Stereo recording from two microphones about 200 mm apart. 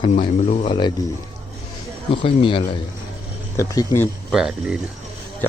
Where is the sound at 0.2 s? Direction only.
30° left (ahead or behind).